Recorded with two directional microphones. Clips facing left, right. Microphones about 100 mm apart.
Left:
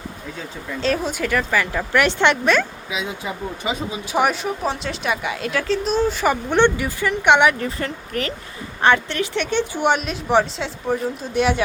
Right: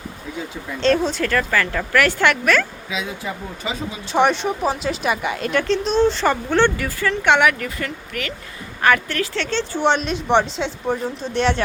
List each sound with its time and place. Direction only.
0.8 s speech: 5° left (ahead or behind)
4.2 s a woman's voice: 5° left (ahead or behind); by 8.3 s 35° left (ahead or behind)
8.8 s speech: 25° left (ahead or behind); by 11.6 s 5° left (ahead or behind)